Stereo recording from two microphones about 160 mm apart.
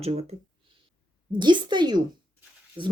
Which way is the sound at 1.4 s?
30° right (ahead or behind).